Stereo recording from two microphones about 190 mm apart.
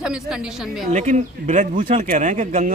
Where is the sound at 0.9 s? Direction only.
40° right (ahead or behind).